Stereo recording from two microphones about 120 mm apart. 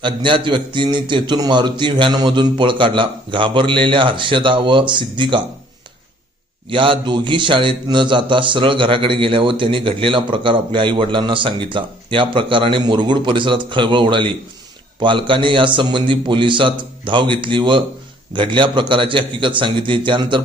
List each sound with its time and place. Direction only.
0.0 s a man's voice: 45° right (ahead or behind)
6.7 s a man's voice: 45° right (ahead or behind)